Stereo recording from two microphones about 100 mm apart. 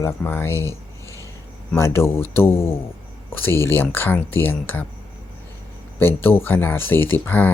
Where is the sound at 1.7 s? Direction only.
25° left (ahead or behind).